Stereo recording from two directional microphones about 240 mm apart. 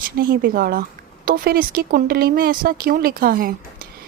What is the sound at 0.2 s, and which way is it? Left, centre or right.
Speech, right.